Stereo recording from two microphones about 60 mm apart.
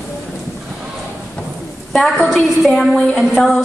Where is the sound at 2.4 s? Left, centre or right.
Centre.